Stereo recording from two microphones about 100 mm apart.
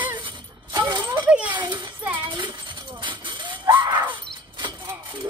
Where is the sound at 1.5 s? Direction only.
50° right (ahead or behind).